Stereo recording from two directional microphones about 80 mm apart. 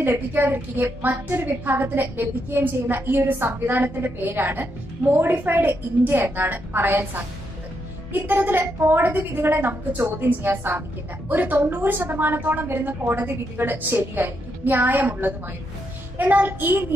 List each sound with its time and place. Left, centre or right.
0.0 s a woman's voice: right